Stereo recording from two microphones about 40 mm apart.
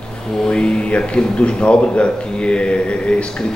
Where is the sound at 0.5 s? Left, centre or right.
Left.